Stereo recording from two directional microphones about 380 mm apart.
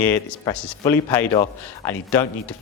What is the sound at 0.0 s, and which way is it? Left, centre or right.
Speech, centre.